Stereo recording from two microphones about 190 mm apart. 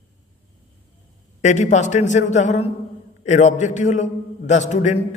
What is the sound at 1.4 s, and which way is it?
A man's voice, 40° left (ahead or behind).